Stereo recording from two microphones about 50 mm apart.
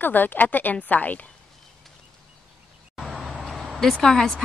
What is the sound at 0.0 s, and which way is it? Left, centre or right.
Speech, left.